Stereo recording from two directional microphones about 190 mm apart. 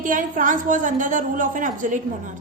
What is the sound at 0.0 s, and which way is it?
A woman's voice, 45° right (ahead or behind).